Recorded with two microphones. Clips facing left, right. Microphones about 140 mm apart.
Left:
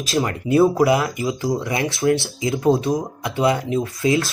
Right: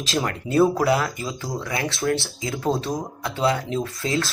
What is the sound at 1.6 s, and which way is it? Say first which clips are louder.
Speech: left 4 dB; 25° left (ahead or behind).